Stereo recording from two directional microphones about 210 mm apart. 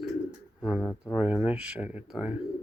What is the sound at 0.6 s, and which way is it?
Speech, centre (ahead or behind).